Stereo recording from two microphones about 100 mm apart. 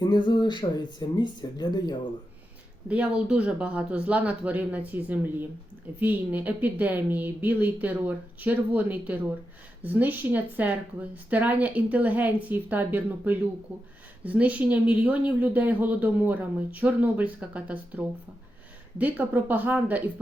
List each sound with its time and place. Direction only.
0.0 s speech: 50° left (ahead or behind)
2.9 s speech: 10° right (ahead or behind)